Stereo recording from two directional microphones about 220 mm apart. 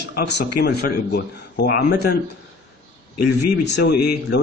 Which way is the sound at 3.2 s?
45° left (ahead or behind).